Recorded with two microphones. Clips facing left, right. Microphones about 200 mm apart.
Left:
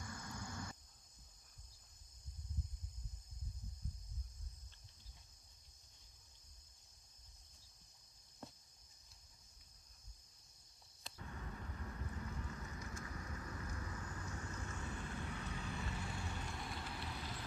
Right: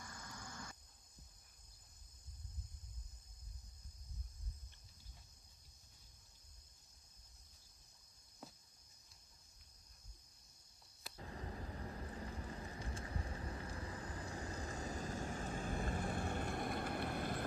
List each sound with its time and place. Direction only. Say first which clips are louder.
0.1 s a sound: left 5 dB; 55° left (ahead or behind)
8.4 s cricket: left 2 dB; centre (ahead or behind)
11.1 s vehicle: right 3 dB; 30° right (ahead or behind); by 17.4 s 55° right (ahead or behind)